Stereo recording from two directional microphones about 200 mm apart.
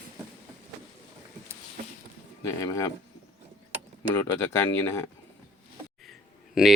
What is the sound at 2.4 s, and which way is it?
Speech, 15° left (ahead or behind).